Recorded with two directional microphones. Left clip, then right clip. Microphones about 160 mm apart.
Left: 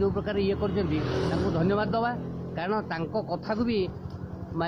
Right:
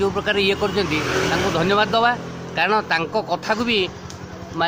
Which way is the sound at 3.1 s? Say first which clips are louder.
Right 8 dB; 50° right (ahead or behind).